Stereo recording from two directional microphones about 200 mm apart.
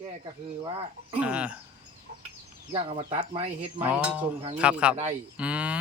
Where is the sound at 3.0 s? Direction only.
20° right (ahead or behind).